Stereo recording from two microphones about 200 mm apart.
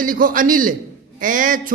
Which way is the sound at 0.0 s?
45° right (ahead or behind).